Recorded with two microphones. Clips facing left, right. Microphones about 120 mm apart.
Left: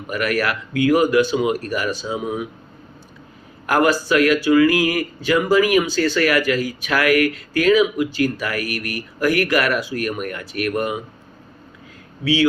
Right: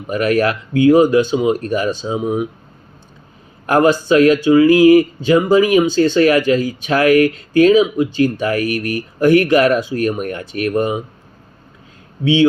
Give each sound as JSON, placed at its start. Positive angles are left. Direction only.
{"t": 0.1, "sound": "speech", "side_deg": -30}
{"t": 3.7, "sound": "speech", "side_deg": -25}
{"t": 12.2, "sound": "speech", "side_deg": -25}